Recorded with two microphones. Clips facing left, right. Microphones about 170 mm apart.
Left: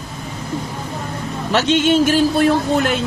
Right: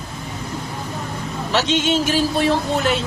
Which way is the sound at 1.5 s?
50° left (ahead or behind).